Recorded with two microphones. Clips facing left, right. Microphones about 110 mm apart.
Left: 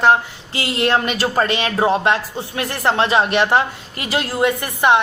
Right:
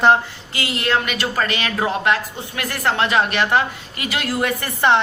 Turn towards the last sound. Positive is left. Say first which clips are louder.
# left 2 dB
turn(degrees=15)  # may be behind; listen again after turning